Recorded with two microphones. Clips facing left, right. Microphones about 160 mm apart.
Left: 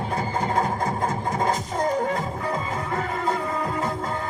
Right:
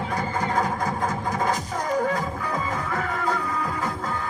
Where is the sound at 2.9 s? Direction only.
25° left (ahead or behind).